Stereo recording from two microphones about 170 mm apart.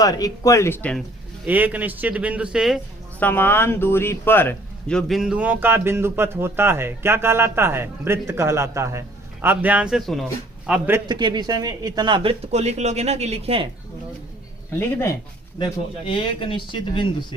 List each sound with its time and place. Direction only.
0.0 s speech: 20° left (ahead or behind)
1.5 s speech: 10° right (ahead or behind)
3.2 s speech: 10° left (ahead or behind)
10.7 s speech: 10° right (ahead or behind)
11.0 s speech: 25° right (ahead or behind)
16.0 s speech: 30° left (ahead or behind)